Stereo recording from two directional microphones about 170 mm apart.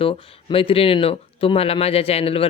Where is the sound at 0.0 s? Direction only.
35° left (ahead or behind).